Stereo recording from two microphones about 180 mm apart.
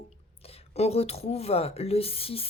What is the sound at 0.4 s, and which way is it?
Speech, 35° left (ahead or behind).